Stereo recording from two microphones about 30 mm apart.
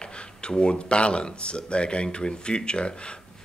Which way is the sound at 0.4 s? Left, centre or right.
Left.